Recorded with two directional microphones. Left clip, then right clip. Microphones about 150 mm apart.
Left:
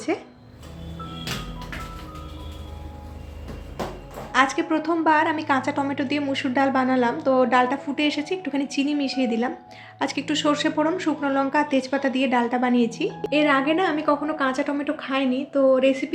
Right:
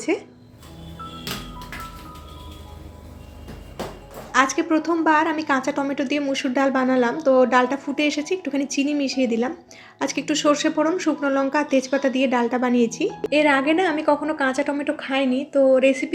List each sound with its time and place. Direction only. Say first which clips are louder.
4.3 s a woman's voice: right 1 dB; 25° right (ahead or behind)